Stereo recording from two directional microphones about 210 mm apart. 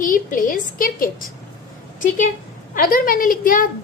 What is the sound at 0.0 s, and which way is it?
A woman's voice, 40° left (ahead or behind).